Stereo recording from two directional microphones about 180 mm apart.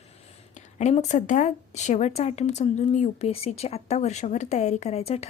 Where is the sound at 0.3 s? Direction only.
40° left (ahead or behind).